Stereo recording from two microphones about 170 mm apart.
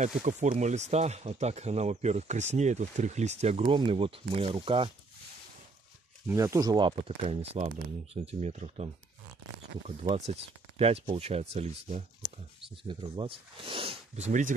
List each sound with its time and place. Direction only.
0.0 s speech: 45° right (ahead or behind); by 4.9 s 30° right (ahead or behind)
6.2 s speech: 20° right (ahead or behind); by 12.0 s 40° right (ahead or behind)
12.8 s speech: 25° right (ahead or behind)
14.1 s speech: 45° right (ahead or behind)